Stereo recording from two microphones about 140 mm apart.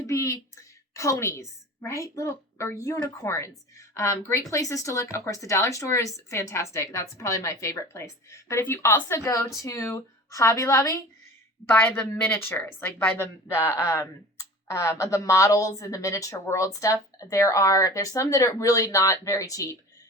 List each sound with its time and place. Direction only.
0.1 s a woman's voice: 20° left (ahead or behind)